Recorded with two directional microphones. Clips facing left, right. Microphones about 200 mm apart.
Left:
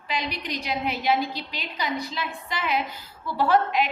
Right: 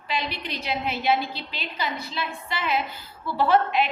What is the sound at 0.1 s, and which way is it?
A woman's voice, 15° left (ahead or behind).